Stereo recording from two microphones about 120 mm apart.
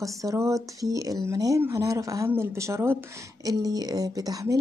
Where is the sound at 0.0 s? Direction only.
25° right (ahead or behind).